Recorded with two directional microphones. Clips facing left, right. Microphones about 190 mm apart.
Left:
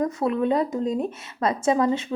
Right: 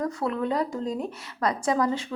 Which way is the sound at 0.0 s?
20° left (ahead or behind).